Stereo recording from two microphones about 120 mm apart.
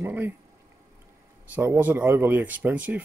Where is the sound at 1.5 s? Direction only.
15° right (ahead or behind).